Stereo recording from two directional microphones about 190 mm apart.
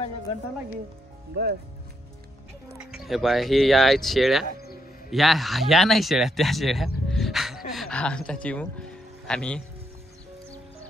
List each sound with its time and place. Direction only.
1.3 s speech: 55° right (ahead or behind)
2.8 s speech: 5° right (ahead or behind)
7.1 s music: centre (ahead or behind)